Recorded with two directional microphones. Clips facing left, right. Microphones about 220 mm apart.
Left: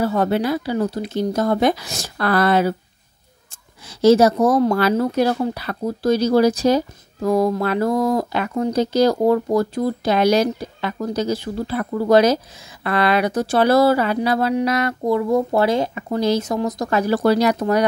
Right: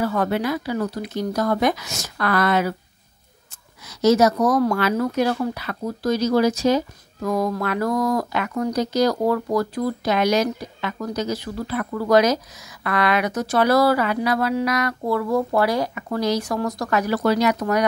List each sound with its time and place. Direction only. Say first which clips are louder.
0.0 s speech: left 3 dB; 30° left (ahead or behind)
3.8 s speech: left 3 dB; 30° left (ahead or behind)